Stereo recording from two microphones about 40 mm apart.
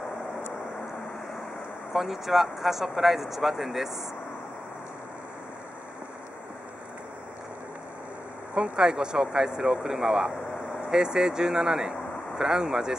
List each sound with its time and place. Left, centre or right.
1.9 s speech: centre
8.5 s speech: centre